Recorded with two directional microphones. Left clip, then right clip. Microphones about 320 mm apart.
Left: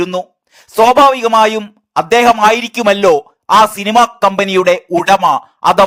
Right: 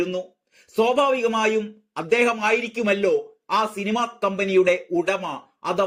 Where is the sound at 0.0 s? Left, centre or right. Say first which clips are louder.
Left 9 dB; left.